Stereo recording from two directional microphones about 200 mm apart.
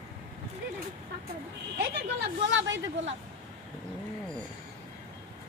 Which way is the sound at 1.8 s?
55° right (ahead or behind).